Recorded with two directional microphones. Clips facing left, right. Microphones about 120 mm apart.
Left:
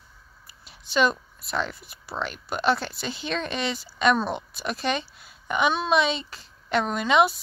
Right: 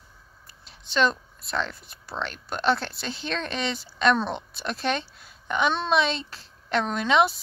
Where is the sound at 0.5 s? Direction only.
5° left (ahead or behind).